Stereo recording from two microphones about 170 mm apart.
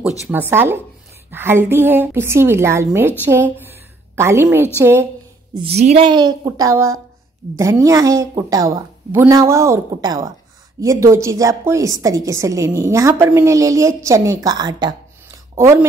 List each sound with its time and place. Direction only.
0.3 s a woman's voice: 10° right (ahead or behind)
5.5 s a woman's voice: 35° right (ahead or behind); by 15.9 s 15° right (ahead or behind)